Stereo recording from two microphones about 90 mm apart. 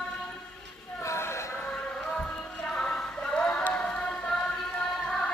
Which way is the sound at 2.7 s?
10° left (ahead or behind).